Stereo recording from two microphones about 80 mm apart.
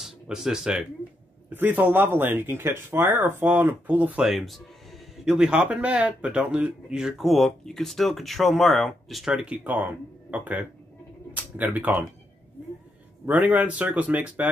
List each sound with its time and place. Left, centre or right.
0.0 s speech: centre
1.5 s speech: right
4.2 s speech: centre
9.3 s speech: centre
13.2 s speech: centre